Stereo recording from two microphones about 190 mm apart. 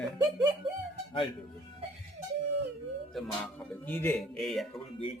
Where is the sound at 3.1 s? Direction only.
10° left (ahead or behind).